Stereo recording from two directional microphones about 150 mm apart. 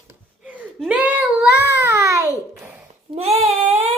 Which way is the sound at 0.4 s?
10° right (ahead or behind).